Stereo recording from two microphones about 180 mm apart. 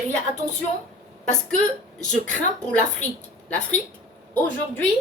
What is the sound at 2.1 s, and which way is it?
Speech, 5° left (ahead or behind).